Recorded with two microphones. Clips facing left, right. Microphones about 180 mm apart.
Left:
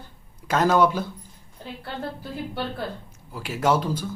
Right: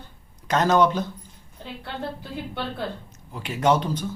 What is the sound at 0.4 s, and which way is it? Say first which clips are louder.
Speech: even; 5° left (ahead or behind).